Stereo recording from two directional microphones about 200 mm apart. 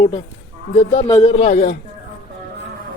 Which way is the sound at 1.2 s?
35° left (ahead or behind).